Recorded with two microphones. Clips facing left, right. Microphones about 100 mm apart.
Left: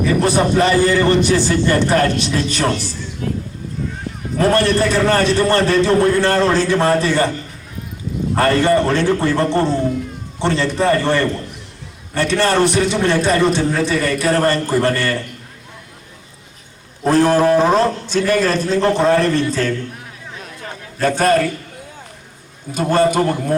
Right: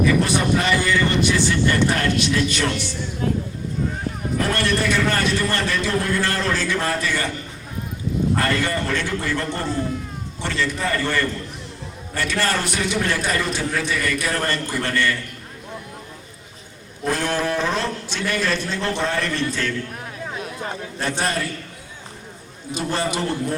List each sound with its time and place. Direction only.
0.1 s a man's voice: 35° left (ahead or behind)
3.2 s vehicle: 30° right (ahead or behind)
4.4 s a man's voice: 35° left (ahead or behind)
8.4 s a man's voice: 35° left (ahead or behind)
17.1 s a man's voice: 35° left (ahead or behind)
21.0 s a man's voice: 50° left (ahead or behind)
22.7 s a man's voice: 50° left (ahead or behind)